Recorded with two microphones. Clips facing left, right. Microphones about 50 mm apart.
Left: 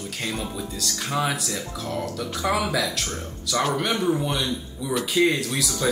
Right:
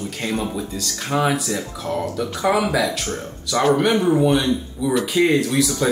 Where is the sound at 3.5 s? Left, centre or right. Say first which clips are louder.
Right 7 dB; right.